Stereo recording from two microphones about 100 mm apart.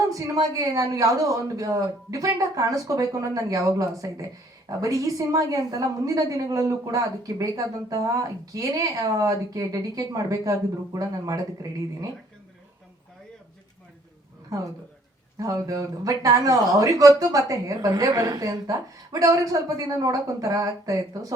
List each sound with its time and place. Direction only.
0.1 s speech: 35° right (ahead or behind)
15.4 s speech: 35° right (ahead or behind)